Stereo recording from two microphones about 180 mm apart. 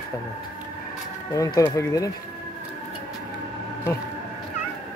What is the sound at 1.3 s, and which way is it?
Speech, 20° left (ahead or behind).